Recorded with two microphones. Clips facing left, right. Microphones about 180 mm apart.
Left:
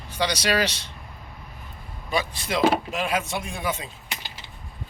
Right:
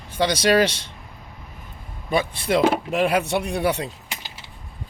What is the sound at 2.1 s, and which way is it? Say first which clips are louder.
Speech: right 5 dB; 55° right (ahead or behind).